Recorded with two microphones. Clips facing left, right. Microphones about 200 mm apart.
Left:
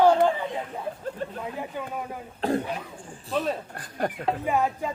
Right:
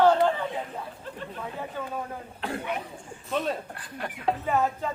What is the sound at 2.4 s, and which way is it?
Speech, 35° left (ahead or behind).